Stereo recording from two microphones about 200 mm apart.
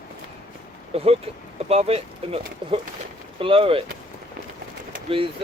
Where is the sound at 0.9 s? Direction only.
30° right (ahead or behind).